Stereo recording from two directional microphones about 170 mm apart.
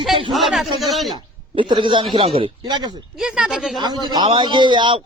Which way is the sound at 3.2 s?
5° right (ahead or behind).